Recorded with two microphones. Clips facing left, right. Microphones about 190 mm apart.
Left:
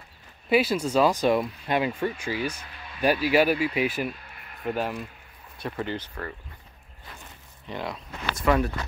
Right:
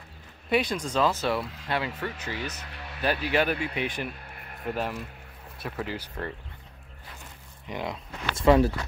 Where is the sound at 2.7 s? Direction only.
70° right (ahead or behind).